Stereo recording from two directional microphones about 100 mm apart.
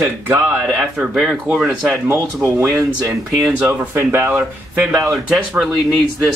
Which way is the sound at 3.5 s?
25° right (ahead or behind).